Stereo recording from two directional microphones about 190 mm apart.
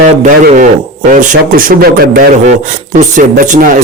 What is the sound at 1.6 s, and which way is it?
Speech, 45° right (ahead or behind).